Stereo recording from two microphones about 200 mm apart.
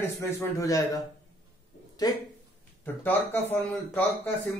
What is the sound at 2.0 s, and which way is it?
Speech, 20° left (ahead or behind).